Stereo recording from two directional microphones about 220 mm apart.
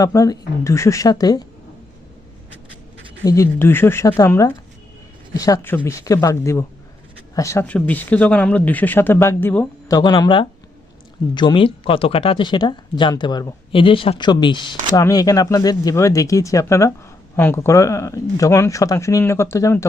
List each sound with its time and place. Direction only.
0.0 s speech: 15° left (ahead or behind)
3.2 s speech: 15° left (ahead or behind)
10.0 s speech: 20° left (ahead or behind)